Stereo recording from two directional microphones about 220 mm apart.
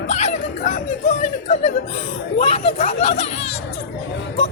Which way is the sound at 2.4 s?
30° left (ahead or behind).